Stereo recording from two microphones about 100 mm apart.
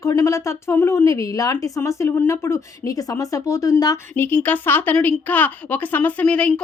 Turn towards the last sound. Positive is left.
turn(degrees=10)  # may be behind; listen again after turning